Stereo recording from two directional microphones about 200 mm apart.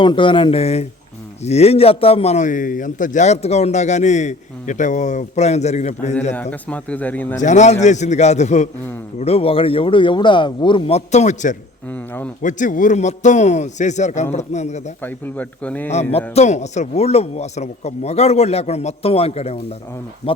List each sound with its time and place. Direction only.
0.0 s a man's voice: 25° left (ahead or behind)
6.3 s speech: 5° left (ahead or behind)
7.3 s a man's voice: 35° left (ahead or behind)
11.9 s speech: 10° left (ahead or behind)
12.4 s a man's voice: 40° left (ahead or behind)
15.0 s speech: 10° left (ahead or behind)
16.3 s a man's voice: 35° left (ahead or behind)